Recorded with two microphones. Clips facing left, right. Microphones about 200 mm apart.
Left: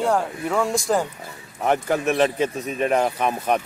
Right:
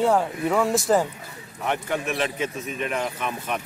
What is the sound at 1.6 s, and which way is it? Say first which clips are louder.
Speech: left 6 dB; 40° left (ahead or behind).